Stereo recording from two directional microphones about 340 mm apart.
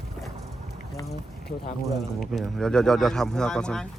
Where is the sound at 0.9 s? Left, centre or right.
Centre.